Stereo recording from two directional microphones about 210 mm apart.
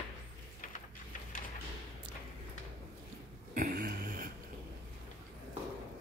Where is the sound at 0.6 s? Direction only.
40° left (ahead or behind).